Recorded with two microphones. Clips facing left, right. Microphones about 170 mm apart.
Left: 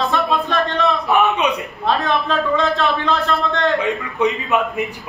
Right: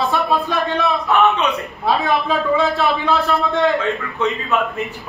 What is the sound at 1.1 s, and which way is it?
Speech, 15° left (ahead or behind).